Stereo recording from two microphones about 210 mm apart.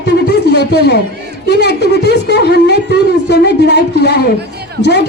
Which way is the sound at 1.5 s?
55° left (ahead or behind).